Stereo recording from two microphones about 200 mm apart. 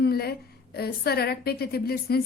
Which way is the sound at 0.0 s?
50° left (ahead or behind).